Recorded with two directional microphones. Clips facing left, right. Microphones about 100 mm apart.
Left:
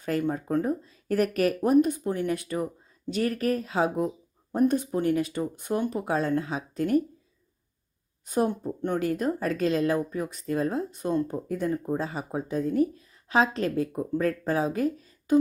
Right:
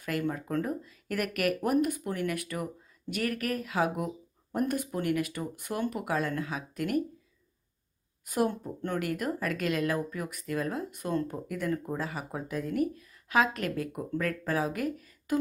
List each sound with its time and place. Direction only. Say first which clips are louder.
0.0 s a woman's voice: left 4 dB; 30° left (ahead or behind)
8.2 s a woman's voice: left 3 dB; 25° left (ahead or behind)